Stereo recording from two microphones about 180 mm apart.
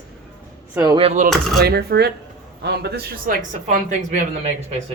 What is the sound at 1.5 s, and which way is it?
Speech, 60° right (ahead or behind).